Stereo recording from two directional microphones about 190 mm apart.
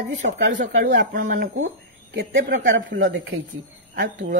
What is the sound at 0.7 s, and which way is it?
Speech, 70° right (ahead or behind).